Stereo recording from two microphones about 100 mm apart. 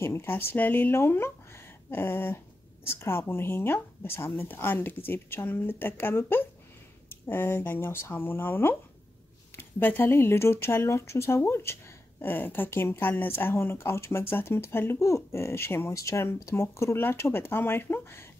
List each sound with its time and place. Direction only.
0.0 s speech: 25° left (ahead or behind)